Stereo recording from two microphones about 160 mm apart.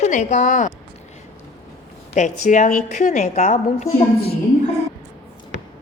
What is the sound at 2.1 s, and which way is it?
A woman's voice, 50° left (ahead or behind).